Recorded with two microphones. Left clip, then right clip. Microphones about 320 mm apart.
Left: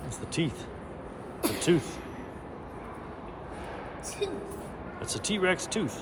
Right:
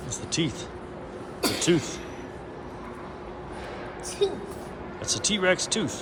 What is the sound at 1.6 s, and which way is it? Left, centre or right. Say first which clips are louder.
Speech: right 2 dB; centre.